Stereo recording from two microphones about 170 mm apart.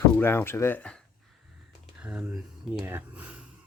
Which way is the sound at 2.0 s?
10° right (ahead or behind).